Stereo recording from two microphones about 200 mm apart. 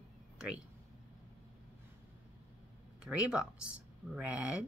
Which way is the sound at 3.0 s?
5° right (ahead or behind).